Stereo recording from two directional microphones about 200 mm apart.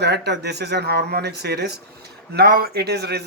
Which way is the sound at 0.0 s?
55° right (ahead or behind).